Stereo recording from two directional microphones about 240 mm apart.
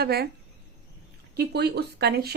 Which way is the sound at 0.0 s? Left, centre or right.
Right.